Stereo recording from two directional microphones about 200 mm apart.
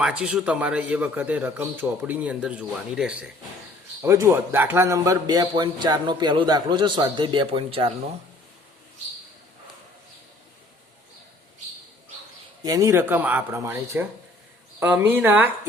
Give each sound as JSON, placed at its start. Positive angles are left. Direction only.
{"t": 0.0, "sound": "a man's voice", "side_deg": -5}
{"t": 12.6, "sound": "a man's voice", "side_deg": -15}